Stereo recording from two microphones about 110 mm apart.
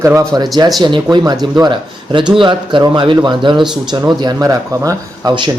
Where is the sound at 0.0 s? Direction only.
25° right (ahead or behind).